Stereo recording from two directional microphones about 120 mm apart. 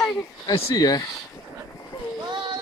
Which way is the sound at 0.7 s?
30° left (ahead or behind).